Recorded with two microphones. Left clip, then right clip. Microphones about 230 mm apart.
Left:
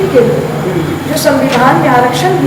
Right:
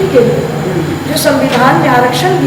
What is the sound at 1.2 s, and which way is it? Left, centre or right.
Speech, centre.